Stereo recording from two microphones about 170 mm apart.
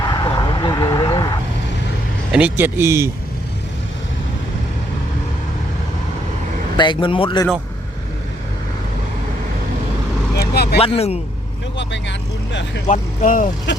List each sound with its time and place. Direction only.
0.0 s vehicle: 25° left (ahead or behind)
2.3 s speech: 10° right (ahead or behind)
6.7 s a man's voice: 25° left (ahead or behind)
10.3 s vehicle: 70° left (ahead or behind)
10.8 s speech: 35° left (ahead or behind)
11.8 s speech: 90° left
12.9 s speech: 50° left (ahead or behind)